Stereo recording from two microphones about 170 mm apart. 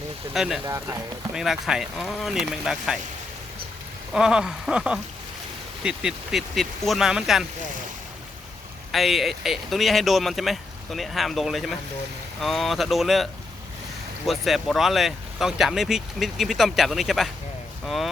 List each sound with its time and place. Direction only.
0.3 s speech: centre (ahead or behind)
0.6 s speech: 20° right (ahead or behind)
1.3 s speech: 5° right (ahead or behind)
4.1 s speech: 5° right (ahead or behind)
8.9 s speech: centre (ahead or behind)
14.3 s speech: centre (ahead or behind)